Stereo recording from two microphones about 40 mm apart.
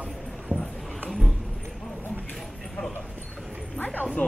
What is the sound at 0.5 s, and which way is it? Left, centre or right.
Dog, right.